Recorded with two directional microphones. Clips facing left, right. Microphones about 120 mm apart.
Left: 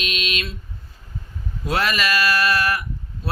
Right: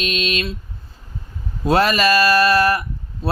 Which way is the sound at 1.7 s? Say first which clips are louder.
Right 7 dB; 35° right (ahead or behind).